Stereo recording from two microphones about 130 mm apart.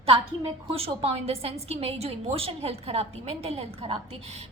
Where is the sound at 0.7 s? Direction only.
50° right (ahead or behind).